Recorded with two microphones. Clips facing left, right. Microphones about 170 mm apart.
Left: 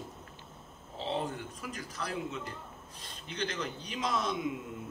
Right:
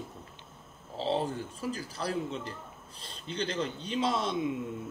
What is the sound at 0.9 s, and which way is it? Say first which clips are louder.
Speech: right 4 dB; 30° right (ahead or behind).